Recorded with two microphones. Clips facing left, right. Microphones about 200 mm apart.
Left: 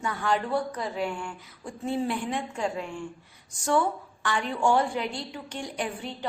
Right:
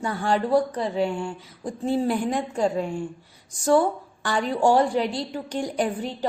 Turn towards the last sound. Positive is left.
turn(degrees=-40)  # may be behind; listen again after turning